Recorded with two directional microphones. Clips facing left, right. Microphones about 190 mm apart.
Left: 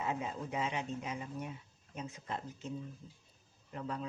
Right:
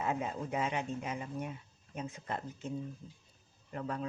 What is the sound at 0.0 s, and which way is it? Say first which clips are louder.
Speech: right 3 dB; 55° right (ahead or behind).